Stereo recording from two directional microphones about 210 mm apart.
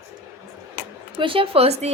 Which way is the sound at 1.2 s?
25° right (ahead or behind).